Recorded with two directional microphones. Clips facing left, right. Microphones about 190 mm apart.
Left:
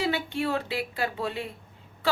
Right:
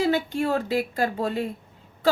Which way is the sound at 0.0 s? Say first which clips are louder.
Right 5 dB; 45° right (ahead or behind).